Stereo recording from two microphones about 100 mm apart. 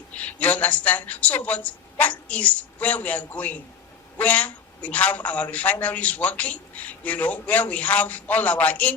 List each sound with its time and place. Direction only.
0.1 s a woman's voice: 15° left (ahead or behind)